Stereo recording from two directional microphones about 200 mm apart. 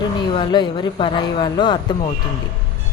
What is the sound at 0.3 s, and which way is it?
Speech, 20° left (ahead or behind).